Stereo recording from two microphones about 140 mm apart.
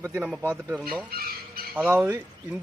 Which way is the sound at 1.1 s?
90° right.